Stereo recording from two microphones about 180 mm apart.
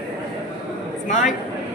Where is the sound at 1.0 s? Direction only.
45° left (ahead or behind).